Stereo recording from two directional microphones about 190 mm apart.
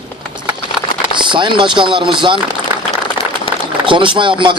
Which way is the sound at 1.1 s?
25° right (ahead or behind).